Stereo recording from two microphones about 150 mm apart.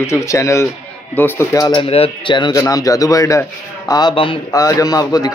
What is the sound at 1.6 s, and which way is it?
A man's voice, 35° left (ahead or behind).